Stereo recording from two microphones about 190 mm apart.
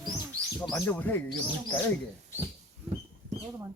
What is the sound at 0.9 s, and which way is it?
Speech, 10° left (ahead or behind).